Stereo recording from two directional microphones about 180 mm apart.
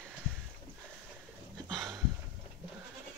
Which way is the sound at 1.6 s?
Centre (ahead or behind).